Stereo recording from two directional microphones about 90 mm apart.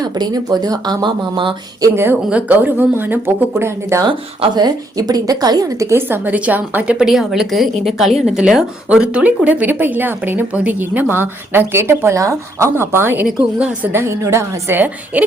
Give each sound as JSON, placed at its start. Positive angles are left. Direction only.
{"t": 0.0, "sound": "speech", "side_deg": -50}
{"t": 2.3, "sound": "speech", "side_deg": -20}
{"t": 4.5, "sound": "speech", "side_deg": -50}
{"t": 6.0, "sound": "a woman's voice", "side_deg": -25}
{"t": 15.1, "sound": "a woman's voice", "side_deg": -15}